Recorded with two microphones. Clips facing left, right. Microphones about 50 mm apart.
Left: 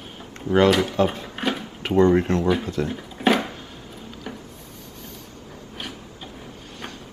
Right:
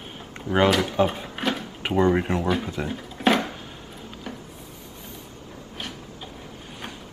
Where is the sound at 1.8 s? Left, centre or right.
Centre.